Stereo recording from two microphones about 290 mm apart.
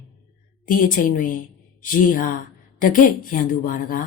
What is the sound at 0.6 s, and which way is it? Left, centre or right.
A woman's voice, left.